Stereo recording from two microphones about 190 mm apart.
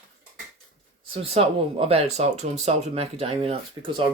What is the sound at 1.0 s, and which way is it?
Speech, 30° right (ahead or behind).